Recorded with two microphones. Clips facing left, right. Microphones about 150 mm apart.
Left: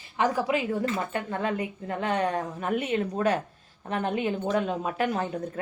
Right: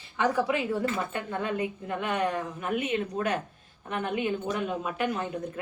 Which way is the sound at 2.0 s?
30° left (ahead or behind).